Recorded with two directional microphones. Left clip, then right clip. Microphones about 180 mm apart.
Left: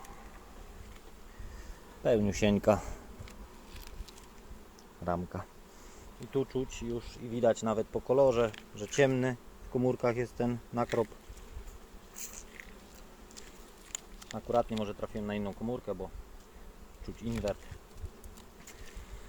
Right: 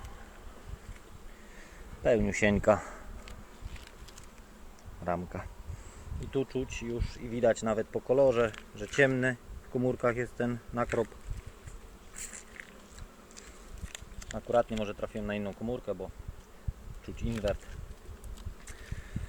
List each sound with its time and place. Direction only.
2.2 s speech: 25° left (ahead or behind)
5.0 s speech: 20° left (ahead or behind)
10.8 s bee: centre (ahead or behind)
14.3 s speech: 5° left (ahead or behind)
17.2 s speech: 5° left (ahead or behind)